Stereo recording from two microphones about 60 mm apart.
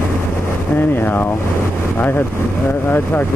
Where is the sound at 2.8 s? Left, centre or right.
Left.